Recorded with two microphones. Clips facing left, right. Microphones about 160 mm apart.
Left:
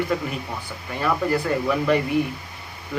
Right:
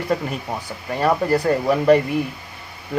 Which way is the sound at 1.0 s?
40° right (ahead or behind).